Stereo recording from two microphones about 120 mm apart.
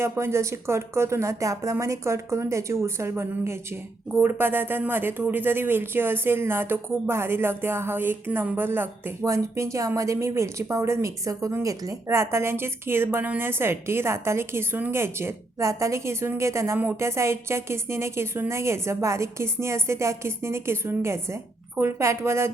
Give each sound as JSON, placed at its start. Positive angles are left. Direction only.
{"t": 0.0, "sound": "speech", "side_deg": -20}